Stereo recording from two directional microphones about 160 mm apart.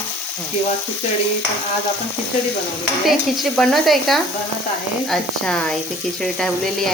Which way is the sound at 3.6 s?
Centre (ahead or behind).